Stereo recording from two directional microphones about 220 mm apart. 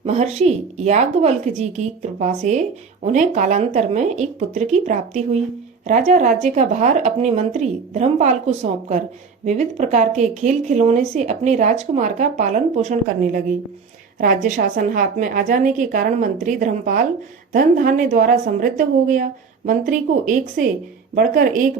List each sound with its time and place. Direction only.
0.0 s speech: 30° right (ahead or behind)